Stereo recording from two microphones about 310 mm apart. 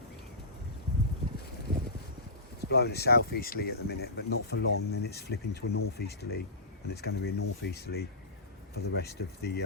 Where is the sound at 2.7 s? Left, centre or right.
Left.